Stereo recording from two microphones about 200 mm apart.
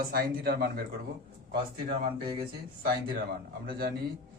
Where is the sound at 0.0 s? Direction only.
45° right (ahead or behind).